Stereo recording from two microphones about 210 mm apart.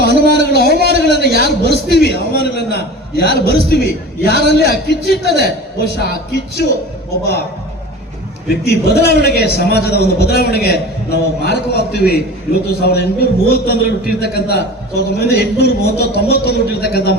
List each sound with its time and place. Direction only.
0.0 s a sound: 50° left (ahead or behind)
0.9 s a man's voice: 50° left (ahead or behind)
8.9 s a man's voice: 50° left (ahead or behind)